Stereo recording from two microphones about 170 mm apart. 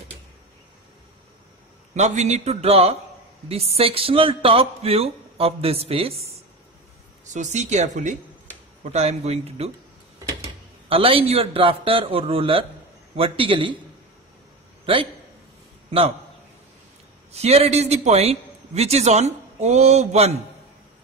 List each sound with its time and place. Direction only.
2.0 s a man's voice: 40° right (ahead or behind)
7.3 s a man's voice: 45° right (ahead or behind)
10.9 s a man's voice: 35° right (ahead or behind)
17.3 s a man's voice: 40° right (ahead or behind)